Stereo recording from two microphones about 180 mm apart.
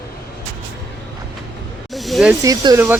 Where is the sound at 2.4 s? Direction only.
20° right (ahead or behind).